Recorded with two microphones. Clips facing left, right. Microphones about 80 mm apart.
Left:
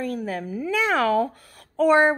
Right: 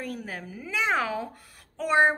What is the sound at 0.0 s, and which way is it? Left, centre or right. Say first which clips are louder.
A woman's voice: left 8 dB; left.